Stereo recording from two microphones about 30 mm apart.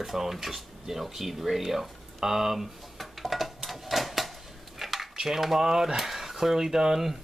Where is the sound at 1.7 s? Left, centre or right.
Centre.